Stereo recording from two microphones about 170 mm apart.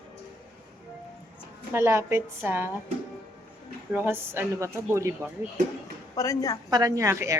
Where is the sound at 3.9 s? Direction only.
10° right (ahead or behind).